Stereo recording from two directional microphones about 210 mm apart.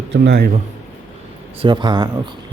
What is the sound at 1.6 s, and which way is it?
Speech, 20° right (ahead or behind).